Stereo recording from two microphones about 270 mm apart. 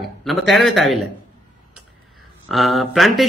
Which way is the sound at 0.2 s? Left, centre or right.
Centre.